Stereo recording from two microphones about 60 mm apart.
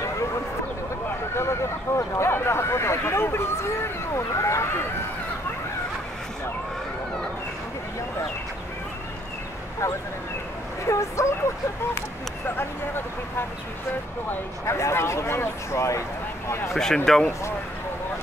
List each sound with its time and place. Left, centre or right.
1.3 s speech: left
10.9 s speech: left
12.4 s speech: left
14.7 s speech: left
16.7 s speech: centre